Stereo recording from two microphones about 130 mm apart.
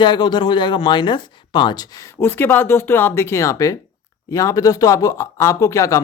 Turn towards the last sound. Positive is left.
turn(degrees=25)  # may be behind; listen again after turning